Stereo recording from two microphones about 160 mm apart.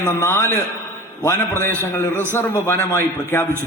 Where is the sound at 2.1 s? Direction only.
15° right (ahead or behind).